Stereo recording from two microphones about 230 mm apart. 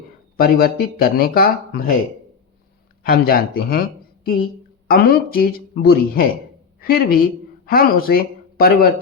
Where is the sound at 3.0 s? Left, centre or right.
Left.